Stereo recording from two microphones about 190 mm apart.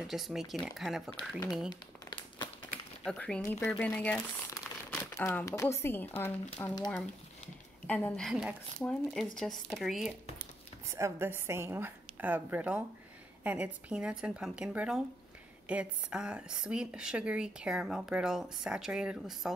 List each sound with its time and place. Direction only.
0.0 s speech: centre (ahead or behind)
1.7 s crumpling: 25° left (ahead or behind)
3.0 s speech: 5° left (ahead or behind)
7.8 s speech: 10° left (ahead or behind)
10.9 s a woman's voice: 15° right (ahead or behind)